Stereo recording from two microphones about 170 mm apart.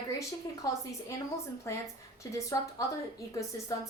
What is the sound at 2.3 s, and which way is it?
Speech, 20° left (ahead or behind).